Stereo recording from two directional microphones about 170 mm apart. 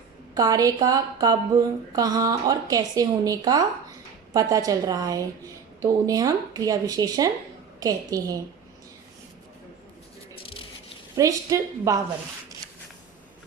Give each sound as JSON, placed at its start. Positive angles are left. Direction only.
{"t": 0.3, "sound": "speech", "side_deg": -20}
{"t": 11.1, "sound": "speech", "side_deg": -20}